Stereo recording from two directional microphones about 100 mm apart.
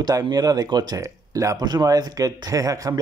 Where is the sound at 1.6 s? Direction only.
45° right (ahead or behind).